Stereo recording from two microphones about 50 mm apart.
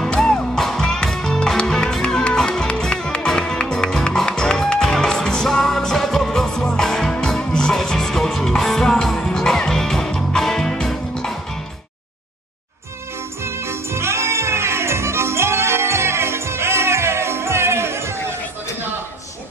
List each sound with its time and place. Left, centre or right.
0.2 s music: centre
13.4 s music: right